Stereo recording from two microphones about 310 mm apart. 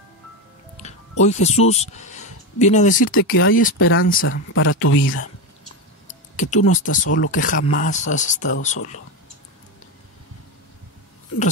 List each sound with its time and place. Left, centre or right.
0.7 s speech: left
3.1 s speech: left
6.5 s speech: left
6.9 s speech: left
7.2 s speech: left